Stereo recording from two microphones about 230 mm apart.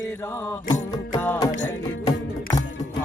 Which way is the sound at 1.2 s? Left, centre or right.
Centre.